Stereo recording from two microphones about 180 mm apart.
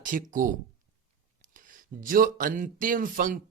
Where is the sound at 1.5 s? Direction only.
50° right (ahead or behind).